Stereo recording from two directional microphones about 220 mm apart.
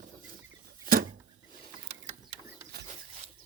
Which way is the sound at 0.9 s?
40° right (ahead or behind).